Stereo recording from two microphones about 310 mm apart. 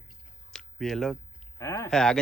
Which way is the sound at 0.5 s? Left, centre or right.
Centre.